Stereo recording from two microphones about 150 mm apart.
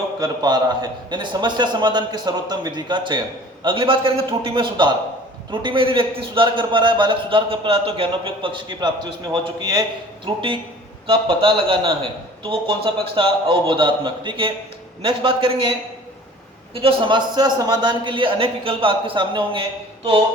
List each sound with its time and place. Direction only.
0.2 s a man's voice: 30° right (ahead or behind)
16.8 s a man's voice: 30° right (ahead or behind)